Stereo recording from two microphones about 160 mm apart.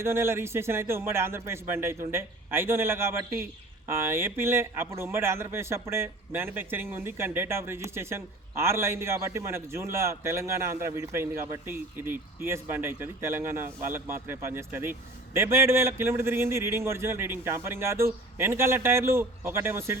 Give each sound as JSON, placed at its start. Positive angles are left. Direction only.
{"t": 0.0, "sound": "a man's voice", "side_deg": -15}